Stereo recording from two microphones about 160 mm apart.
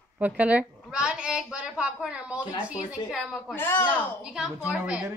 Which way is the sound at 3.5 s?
15° left (ahead or behind).